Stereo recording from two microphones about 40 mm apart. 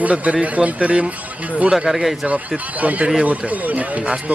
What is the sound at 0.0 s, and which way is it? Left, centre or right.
Speech, right.